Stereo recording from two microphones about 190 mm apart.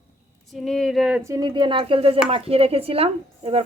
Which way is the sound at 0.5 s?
Centre (ahead or behind).